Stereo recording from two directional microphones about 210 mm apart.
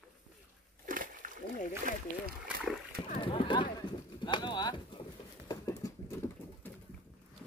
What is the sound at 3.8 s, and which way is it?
Pigeon, 20° left (ahead or behind).